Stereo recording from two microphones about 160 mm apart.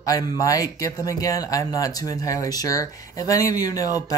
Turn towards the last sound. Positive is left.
turn(degrees=20)  # may be behind; listen again after turning